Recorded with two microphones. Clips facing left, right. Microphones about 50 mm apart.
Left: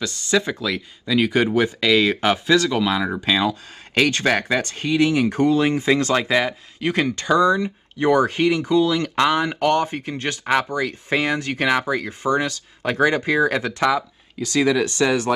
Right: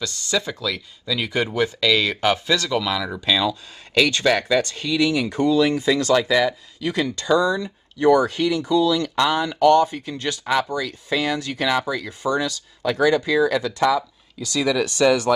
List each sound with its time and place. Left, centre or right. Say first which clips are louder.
0.0 s speech: left 4 dB; left